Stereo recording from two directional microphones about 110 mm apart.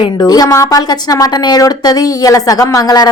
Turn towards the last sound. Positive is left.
turn(degrees=35)  # may be behind; listen again after turning